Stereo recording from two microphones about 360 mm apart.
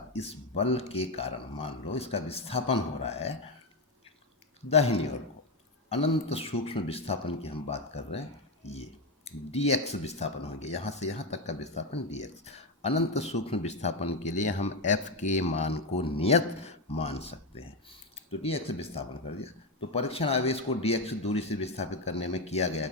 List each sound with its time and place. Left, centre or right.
0.1 s speech: centre
4.7 s speech: centre